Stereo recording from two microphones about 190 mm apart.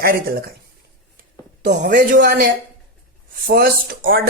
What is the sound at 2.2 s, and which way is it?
Speech, 55° right (ahead or behind).